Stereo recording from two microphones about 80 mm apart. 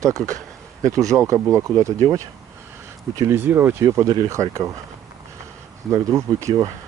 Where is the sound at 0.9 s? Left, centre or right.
Right.